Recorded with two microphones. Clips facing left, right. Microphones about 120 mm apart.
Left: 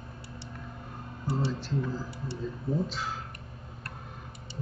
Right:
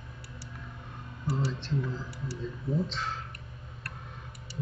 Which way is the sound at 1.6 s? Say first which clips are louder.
Left 1 dB; 5° left (ahead or behind).